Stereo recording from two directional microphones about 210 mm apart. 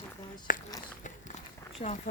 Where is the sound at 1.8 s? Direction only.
30° left (ahead or behind).